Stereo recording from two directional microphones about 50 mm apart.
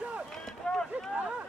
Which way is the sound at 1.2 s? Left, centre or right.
Right.